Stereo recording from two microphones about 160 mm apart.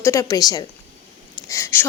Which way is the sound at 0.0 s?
20° left (ahead or behind).